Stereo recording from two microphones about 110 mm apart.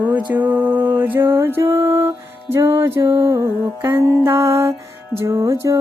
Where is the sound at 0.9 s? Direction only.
15° right (ahead or behind).